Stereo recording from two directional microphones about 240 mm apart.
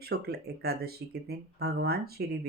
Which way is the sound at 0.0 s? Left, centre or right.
Right.